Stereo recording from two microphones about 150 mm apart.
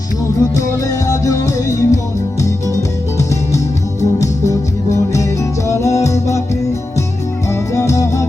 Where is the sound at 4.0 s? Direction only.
20° left (ahead or behind).